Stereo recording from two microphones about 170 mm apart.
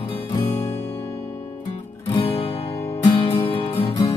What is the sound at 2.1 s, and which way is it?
Music, 35° left (ahead or behind).